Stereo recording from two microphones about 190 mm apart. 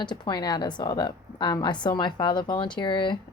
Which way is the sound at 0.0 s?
20° left (ahead or behind).